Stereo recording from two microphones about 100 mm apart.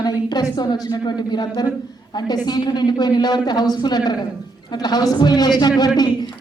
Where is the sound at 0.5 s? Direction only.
45° left (ahead or behind).